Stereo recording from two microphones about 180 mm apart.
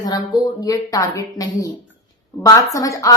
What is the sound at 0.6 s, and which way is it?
A woman's voice, 20° left (ahead or behind).